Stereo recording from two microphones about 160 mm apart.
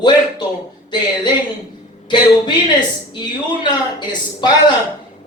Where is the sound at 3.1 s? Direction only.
30° left (ahead or behind).